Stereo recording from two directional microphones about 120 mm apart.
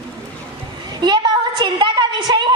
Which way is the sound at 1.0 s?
40° right (ahead or behind).